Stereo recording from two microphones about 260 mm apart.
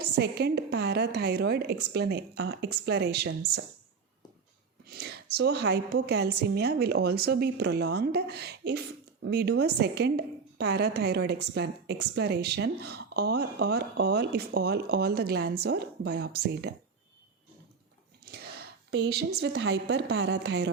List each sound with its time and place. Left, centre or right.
0.0 s a woman's voice: right
4.9 s a woman's voice: right
18.3 s a sound: right
19.4 s a woman's voice: right